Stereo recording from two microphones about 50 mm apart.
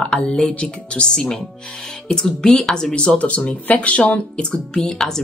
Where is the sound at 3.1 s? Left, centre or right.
Left.